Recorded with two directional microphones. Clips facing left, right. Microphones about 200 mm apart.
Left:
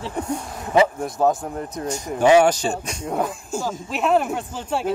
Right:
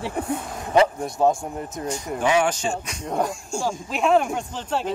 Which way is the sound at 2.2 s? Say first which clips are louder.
Left 6 dB; 40° left (ahead or behind).